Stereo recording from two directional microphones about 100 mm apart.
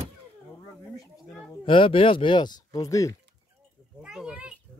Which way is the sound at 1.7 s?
60° left (ahead or behind).